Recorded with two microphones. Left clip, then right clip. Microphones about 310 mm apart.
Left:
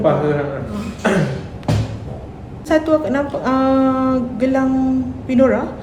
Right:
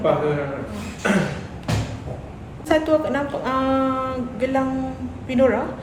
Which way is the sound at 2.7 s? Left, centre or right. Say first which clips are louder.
Left 3 dB; centre.